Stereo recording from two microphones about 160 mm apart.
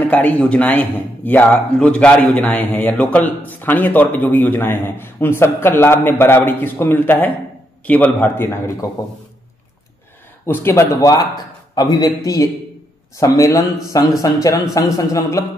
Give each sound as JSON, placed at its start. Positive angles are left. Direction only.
{"t": 0.0, "sound": "a man's voice", "side_deg": 10}
{"t": 10.4, "sound": "a man's voice", "side_deg": 15}